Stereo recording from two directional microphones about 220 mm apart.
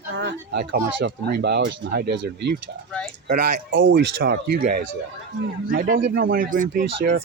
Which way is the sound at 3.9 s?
45° right (ahead or behind).